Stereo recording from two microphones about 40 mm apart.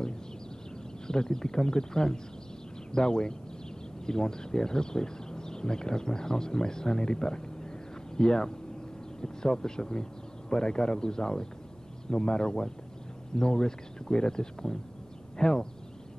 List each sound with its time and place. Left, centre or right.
1.0 s speech: centre